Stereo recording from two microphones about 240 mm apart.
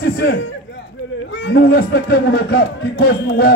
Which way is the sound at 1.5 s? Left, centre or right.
Left.